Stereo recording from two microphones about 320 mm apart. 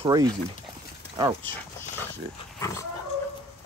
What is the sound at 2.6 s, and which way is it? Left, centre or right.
Dog, centre.